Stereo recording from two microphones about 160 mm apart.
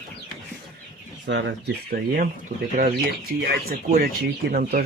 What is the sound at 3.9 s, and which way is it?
Speech, 65° right (ahead or behind).